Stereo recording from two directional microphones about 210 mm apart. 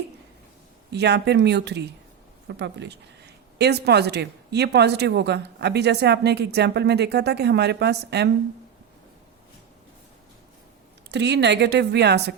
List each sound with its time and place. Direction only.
0.9 s a woman's voice: 55° right (ahead or behind)
11.1 s a woman's voice: 55° right (ahead or behind)